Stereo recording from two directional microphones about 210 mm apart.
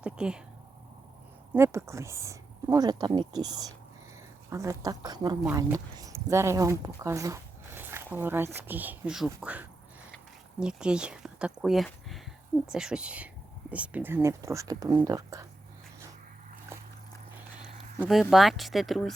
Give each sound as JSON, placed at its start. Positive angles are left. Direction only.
{"t": 0.0, "sound": "speech", "side_deg": -5}
{"t": 1.5, "sound": "speech", "side_deg": -10}
{"t": 18.0, "sound": "speech", "side_deg": 0}